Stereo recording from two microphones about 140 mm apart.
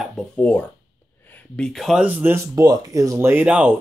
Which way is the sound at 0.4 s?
10° left (ahead or behind).